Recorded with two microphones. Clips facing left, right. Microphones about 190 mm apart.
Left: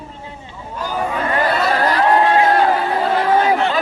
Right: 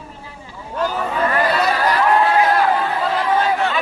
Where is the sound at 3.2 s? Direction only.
60° left (ahead or behind).